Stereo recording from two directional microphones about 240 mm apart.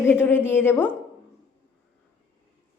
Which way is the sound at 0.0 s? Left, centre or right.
Centre.